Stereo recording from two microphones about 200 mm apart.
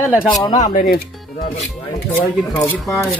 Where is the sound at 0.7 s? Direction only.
50° left (ahead or behind).